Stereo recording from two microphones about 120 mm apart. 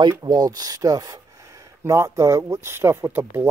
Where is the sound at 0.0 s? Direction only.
35° right (ahead or behind).